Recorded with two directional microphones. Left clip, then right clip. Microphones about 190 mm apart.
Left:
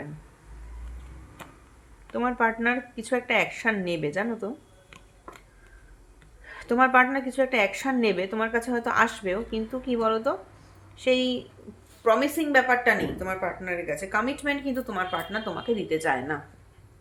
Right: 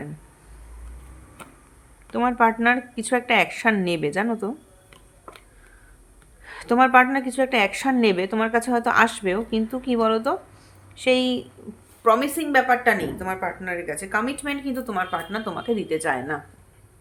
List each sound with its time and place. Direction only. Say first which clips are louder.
2.1 s a woman's voice: right 5 dB; 30° right (ahead or behind)
6.4 s a woman's voice: right 4 dB; 30° right (ahead or behind)